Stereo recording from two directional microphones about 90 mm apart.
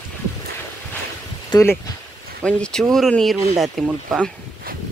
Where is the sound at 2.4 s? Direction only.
10° left (ahead or behind).